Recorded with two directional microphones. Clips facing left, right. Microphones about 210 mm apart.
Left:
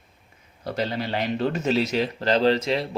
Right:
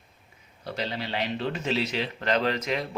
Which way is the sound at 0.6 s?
45° left (ahead or behind).